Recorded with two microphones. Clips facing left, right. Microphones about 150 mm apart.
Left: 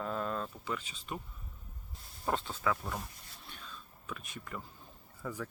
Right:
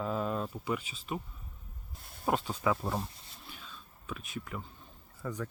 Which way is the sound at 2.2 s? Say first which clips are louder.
Right 3 dB; 15° right (ahead or behind).